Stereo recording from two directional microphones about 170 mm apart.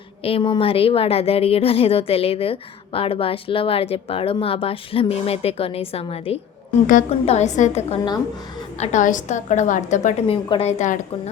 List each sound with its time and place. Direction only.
0.3 s a woman's voice: 30° left (ahead or behind)